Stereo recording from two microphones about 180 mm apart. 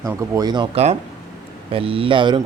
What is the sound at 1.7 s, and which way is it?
Speech, 30° right (ahead or behind).